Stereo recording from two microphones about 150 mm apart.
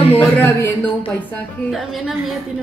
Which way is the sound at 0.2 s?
15° left (ahead or behind).